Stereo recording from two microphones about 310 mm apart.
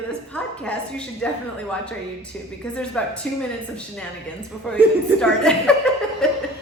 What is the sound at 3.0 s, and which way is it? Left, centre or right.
Speech, centre.